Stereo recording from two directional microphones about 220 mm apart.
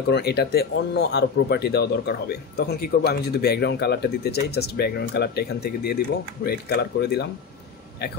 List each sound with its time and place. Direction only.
0.1 s speech: 45° left (ahead or behind)